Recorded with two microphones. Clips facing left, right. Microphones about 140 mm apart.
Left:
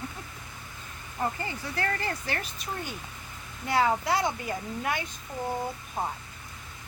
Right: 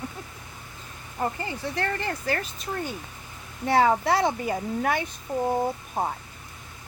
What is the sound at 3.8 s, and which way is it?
Speech, 50° right (ahead or behind).